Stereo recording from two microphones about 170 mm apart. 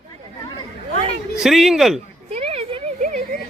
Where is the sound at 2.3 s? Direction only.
35° right (ahead or behind).